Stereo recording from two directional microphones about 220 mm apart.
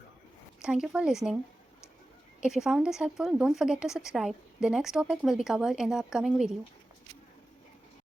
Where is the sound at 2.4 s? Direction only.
5° right (ahead or behind).